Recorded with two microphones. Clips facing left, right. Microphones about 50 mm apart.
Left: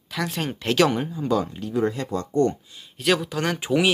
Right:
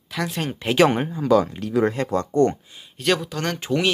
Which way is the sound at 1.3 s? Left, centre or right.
Right.